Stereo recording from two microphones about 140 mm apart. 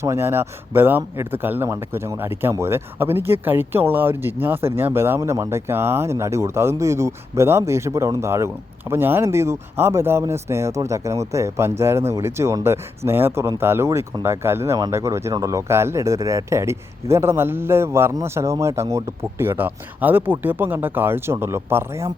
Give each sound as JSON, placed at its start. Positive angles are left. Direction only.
{"t": 0.0, "sound": "speech", "side_deg": -20}